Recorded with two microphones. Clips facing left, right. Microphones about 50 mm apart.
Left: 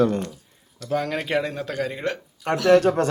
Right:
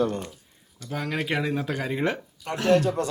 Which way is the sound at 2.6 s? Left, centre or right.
Left.